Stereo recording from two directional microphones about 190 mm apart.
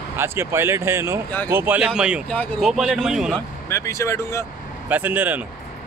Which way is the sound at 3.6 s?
15° left (ahead or behind).